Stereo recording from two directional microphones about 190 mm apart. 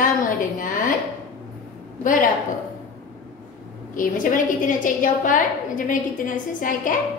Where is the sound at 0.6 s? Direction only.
45° left (ahead or behind).